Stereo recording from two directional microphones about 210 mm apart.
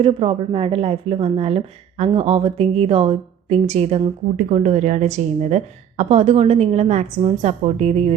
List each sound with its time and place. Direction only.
0.0 s a woman's voice: 25° right (ahead or behind)